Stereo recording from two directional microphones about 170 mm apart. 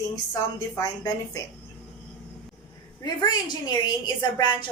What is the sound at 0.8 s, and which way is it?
Speech, 20° left (ahead or behind).